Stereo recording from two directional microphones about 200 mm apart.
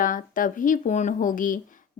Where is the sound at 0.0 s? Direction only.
40° left (ahead or behind).